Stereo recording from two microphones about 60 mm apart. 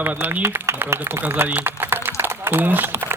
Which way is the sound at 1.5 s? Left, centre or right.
Right.